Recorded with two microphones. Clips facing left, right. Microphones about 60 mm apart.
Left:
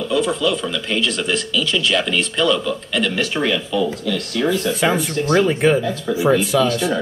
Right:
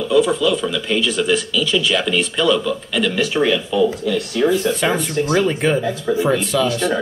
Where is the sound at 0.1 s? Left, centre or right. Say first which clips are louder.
Right 4 dB; centre.